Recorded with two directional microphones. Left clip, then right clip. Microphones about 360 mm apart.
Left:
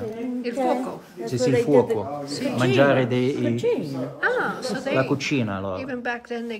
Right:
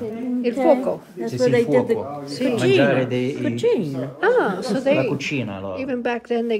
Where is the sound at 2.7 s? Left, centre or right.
Left.